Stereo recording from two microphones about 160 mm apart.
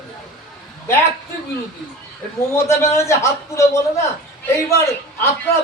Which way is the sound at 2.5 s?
15° left (ahead or behind).